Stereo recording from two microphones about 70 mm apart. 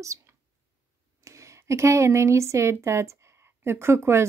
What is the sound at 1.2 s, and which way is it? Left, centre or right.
A woman's voice, right.